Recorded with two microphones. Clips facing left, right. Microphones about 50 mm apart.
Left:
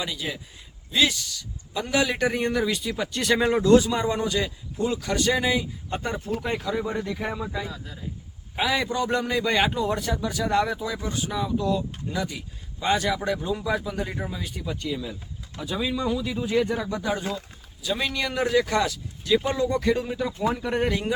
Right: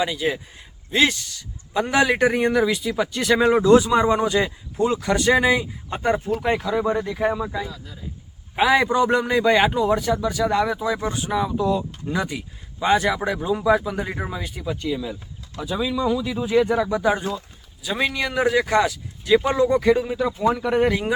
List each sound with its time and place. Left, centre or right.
0.0 s speech: right
2.3 s a man's voice: centre
3.6 s speech: right
6.6 s a man's voice: centre
8.5 s a man's voice: centre
10.8 s a man's voice: right
14.4 s a man's voice: centre
16.4 s a man's voice: centre